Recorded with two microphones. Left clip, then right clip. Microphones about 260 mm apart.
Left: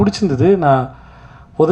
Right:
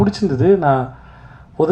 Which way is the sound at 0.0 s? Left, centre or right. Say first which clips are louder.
Left 1 dB; left.